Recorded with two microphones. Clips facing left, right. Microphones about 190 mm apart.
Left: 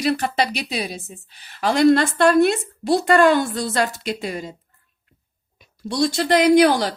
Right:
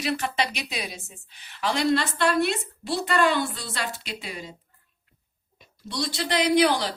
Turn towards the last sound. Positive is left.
turn(degrees=45)  # may be behind; listen again after turning